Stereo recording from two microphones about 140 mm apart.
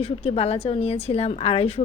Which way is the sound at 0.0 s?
45° left (ahead or behind).